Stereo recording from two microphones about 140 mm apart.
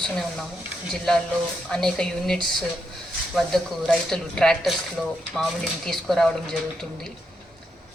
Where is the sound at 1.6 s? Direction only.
5° left (ahead or behind).